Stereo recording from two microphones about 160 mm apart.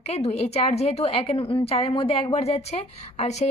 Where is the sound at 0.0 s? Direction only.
40° left (ahead or behind).